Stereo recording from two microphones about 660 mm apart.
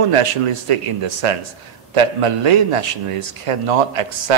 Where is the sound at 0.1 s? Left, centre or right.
Right.